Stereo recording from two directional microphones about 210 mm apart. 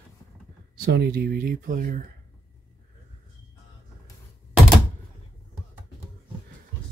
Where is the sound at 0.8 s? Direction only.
50° right (ahead or behind).